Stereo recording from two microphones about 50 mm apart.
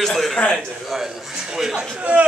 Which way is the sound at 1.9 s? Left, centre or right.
Right.